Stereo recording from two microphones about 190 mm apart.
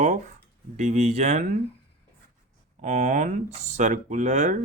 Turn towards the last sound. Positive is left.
turn(degrees=-40)  # may be behind; listen again after turning